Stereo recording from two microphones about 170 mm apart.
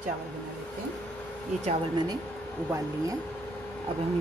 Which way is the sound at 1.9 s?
25° right (ahead or behind).